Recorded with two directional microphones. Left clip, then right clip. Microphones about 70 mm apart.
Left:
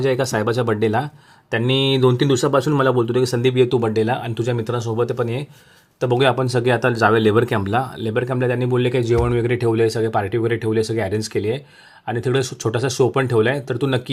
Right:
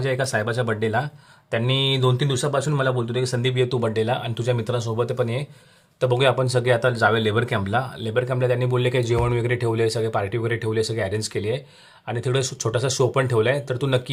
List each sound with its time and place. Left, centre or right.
0.0 s speech: left
1.5 s speech: left
2.3 s speech: left
7.8 s speech: left
8.7 s speech: left
9.5 s speech: left